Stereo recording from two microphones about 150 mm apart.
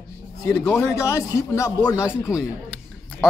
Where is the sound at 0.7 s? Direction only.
20° left (ahead or behind).